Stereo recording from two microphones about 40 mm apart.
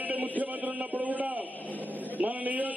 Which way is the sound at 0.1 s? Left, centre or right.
Right.